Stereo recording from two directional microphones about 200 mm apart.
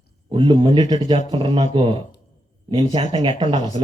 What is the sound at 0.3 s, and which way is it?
Speech, 25° right (ahead or behind).